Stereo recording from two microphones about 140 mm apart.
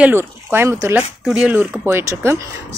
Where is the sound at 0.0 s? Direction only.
15° right (ahead or behind).